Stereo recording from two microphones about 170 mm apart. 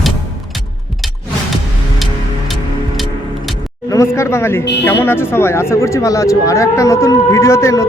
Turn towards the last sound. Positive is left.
turn(degrees=15)  # may be behind; listen again after turning